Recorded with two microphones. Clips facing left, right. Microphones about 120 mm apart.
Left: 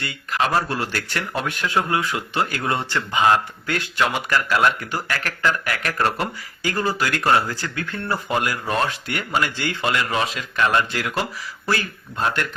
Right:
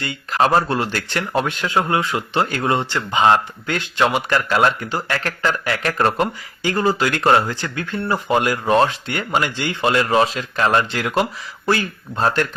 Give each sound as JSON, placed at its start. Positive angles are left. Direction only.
{"t": 0.0, "sound": "speech", "side_deg": -35}
{"t": 2.7, "sound": "speech", "side_deg": -20}